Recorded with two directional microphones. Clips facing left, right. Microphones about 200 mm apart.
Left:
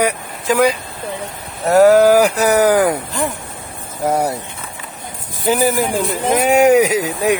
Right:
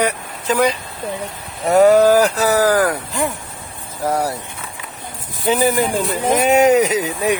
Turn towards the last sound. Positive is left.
turn(degrees=10)  # may be behind; listen again after turning